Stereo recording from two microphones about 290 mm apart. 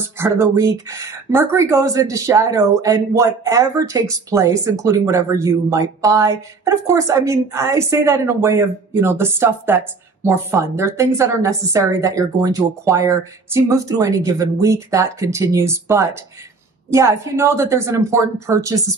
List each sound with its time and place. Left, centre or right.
0.2 s a woman's voice: centre